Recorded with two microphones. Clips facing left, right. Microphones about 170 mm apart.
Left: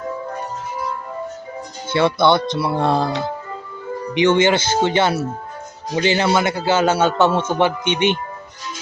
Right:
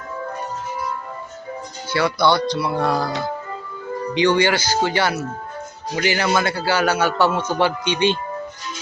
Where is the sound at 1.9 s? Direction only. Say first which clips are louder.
Left 3 dB; 25° left (ahead or behind).